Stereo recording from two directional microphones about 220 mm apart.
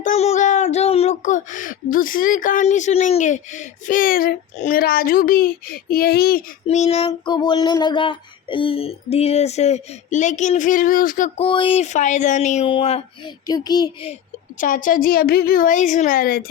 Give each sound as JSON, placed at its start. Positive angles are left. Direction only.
{"t": 0.0, "sound": "speech", "side_deg": 30}
{"t": 6.7, "sound": "female singing", "side_deg": 30}
{"t": 11.4, "sound": "speech", "side_deg": 25}
{"t": 14.6, "sound": "speech", "side_deg": 40}